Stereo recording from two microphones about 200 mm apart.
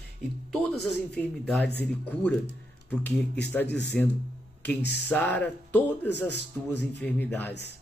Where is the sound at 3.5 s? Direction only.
5° left (ahead or behind).